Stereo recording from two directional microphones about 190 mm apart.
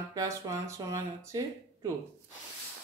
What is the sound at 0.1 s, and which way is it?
Speech, 20° right (ahead or behind).